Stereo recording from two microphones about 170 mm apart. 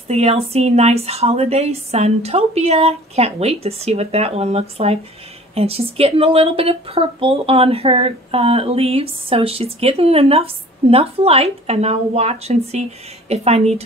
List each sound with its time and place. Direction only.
0.1 s a woman's voice: 40° right (ahead or behind)